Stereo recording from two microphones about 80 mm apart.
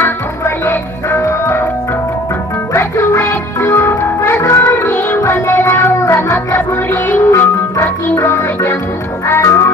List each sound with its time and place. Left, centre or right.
0.7 s music: left
2.7 s music: left